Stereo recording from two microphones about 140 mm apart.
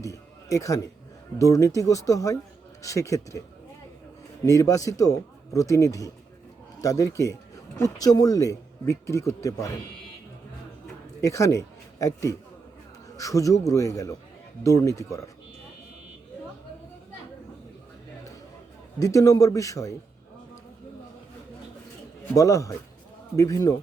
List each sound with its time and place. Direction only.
0.0 s a sound: 25° left (ahead or behind)
1.4 s speech: 20° left (ahead or behind)
4.4 s speech: 25° left (ahead or behind)
11.2 s a man's voice: 20° left (ahead or behind)
18.9 s speech: 25° left (ahead or behind)
22.4 s speech: 25° left (ahead or behind)